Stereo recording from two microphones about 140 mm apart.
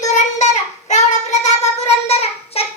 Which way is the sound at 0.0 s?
60° left (ahead or behind).